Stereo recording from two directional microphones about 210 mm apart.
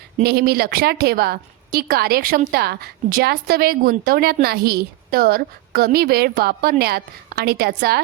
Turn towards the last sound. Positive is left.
turn(degrees=-50)  # may be behind; listen again after turning